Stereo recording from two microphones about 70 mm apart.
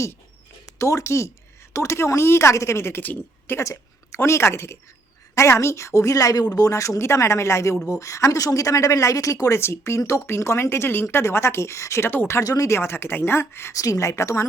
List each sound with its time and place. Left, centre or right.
0.6 s speech: left
3.6 s a woman's voice: left
6.5 s speech: left
9.6 s speech: left
12.4 s speech: left
13.7 s speech: left